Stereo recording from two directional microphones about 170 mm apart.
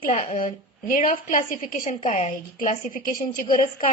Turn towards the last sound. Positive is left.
turn(degrees=50)  # may be behind; listen again after turning